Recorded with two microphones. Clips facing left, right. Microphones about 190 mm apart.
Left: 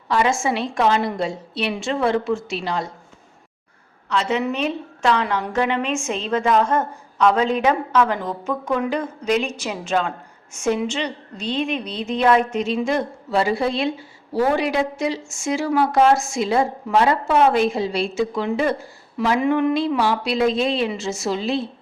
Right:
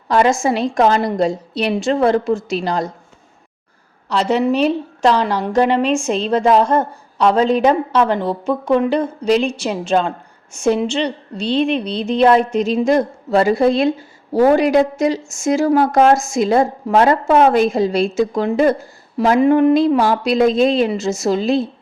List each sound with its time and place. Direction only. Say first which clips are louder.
0.1 s a woman's voice: right 5 dB; 40° right (ahead or behind)
4.1 s a woman's voice: right 6 dB; 40° right (ahead or behind)